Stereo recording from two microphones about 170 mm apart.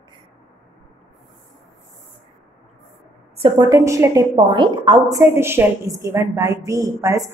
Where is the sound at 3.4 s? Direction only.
25° right (ahead or behind).